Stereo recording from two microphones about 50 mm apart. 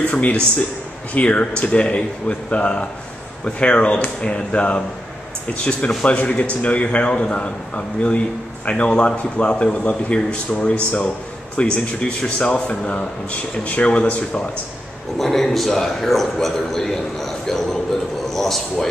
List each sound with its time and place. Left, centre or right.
0.1 s speech: left
15.1 s a man's voice: centre